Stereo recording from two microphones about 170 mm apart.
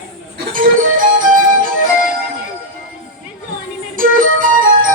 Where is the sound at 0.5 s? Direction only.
55° right (ahead or behind).